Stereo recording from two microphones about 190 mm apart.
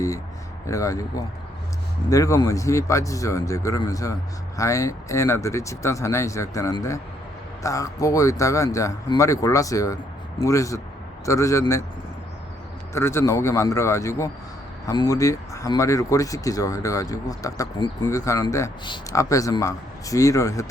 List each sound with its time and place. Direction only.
0.7 s speech: 15° left (ahead or behind)
12.9 s speech: 15° left (ahead or behind)